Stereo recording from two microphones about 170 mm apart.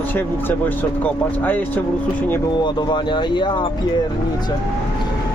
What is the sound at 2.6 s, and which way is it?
Speech, 25° left (ahead or behind).